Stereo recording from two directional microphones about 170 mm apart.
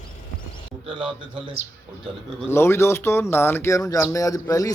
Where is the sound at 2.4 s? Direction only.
15° left (ahead or behind).